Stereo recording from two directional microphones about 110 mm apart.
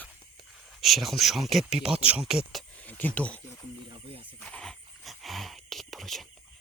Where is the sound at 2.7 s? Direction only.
15° left (ahead or behind).